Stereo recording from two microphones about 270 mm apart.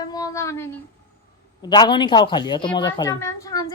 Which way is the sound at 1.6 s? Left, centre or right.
Centre.